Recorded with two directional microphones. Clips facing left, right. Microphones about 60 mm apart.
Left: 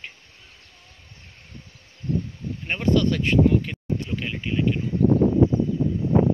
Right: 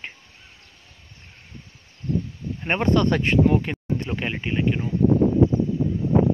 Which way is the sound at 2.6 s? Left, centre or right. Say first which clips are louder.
Right 1 dB; right.